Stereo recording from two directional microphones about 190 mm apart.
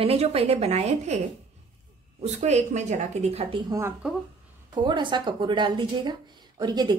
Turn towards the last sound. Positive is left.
turn(degrees=-20)  # may be behind; listen again after turning